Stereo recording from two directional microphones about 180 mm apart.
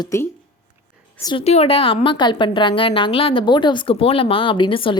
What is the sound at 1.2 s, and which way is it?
A woman's voice, 30° left (ahead or behind).